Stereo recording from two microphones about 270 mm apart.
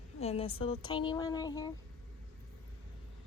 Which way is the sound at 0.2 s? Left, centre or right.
Left.